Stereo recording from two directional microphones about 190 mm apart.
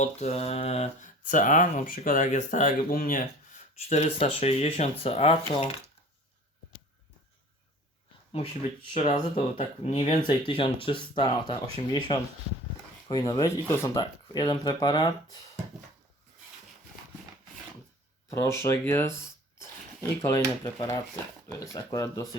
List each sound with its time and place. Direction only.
0.0 s speech: 35° left (ahead or behind)
3.8 s speech: 35° left (ahead or behind)
8.9 s speech: 35° left (ahead or behind)
18.3 s speech: 15° left (ahead or behind)